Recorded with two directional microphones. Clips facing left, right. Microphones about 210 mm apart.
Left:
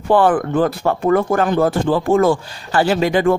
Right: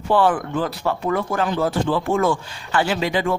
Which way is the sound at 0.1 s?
50° left (ahead or behind).